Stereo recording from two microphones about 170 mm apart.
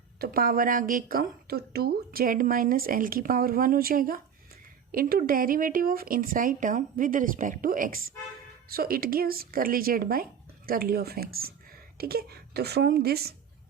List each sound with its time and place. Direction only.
0.2 s a woman's voice: 60° right (ahead or behind)